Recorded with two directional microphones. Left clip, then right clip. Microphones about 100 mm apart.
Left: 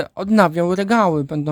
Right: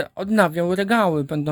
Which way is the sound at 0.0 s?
35° left (ahead or behind).